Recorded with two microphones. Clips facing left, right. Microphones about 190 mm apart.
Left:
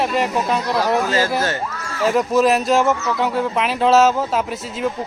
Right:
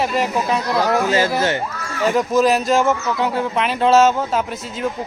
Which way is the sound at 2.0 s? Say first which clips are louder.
Even; centre (ahead or behind).